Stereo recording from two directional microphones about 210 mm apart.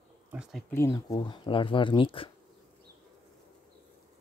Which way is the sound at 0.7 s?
15° left (ahead or behind).